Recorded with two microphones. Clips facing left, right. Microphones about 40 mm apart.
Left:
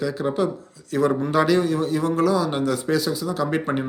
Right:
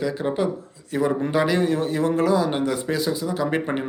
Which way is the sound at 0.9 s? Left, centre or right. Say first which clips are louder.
Left 2 dB; centre.